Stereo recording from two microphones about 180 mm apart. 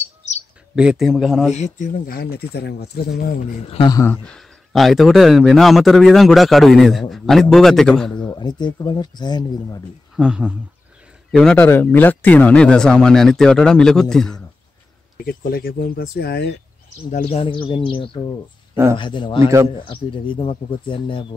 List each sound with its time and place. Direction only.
0.7 s speech: 5° right (ahead or behind)
1.5 s speech: 40° left (ahead or behind); by 3.3 s 60° left (ahead or behind)
3.6 s speech: 30° left (ahead or behind)
3.9 s speech: 15° left (ahead or behind)
8.2 s speech: 25° left (ahead or behind)
10.1 s speech: 5° right (ahead or behind)
11.3 s speech: 10° left (ahead or behind)
15.2 s speech: 55° left (ahead or behind)
17.1 s speech: 35° left (ahead or behind)